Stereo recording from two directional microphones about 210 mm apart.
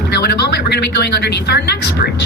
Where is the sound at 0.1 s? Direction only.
50° left (ahead or behind).